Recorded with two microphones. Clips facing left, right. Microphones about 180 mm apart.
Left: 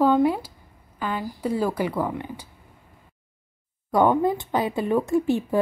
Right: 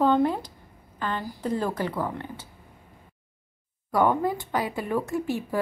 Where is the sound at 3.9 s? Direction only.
20° left (ahead or behind).